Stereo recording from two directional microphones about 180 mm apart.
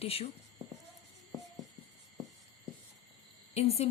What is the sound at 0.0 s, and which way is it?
Speech, 35° left (ahead or behind).